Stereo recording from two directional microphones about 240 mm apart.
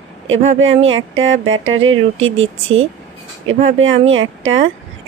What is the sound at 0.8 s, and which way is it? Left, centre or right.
Speech, right.